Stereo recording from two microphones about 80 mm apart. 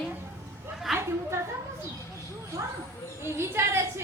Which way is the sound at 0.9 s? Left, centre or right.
Centre.